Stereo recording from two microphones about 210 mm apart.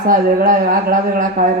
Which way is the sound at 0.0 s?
40° right (ahead or behind).